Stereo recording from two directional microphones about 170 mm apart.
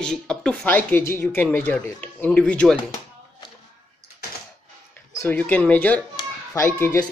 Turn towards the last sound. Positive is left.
turn(degrees=15)  # may be behind; listen again after turning